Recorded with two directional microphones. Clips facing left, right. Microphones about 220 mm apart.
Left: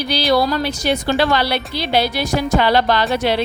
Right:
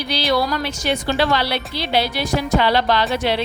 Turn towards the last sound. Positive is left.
turn(degrees=45)  # may be behind; listen again after turning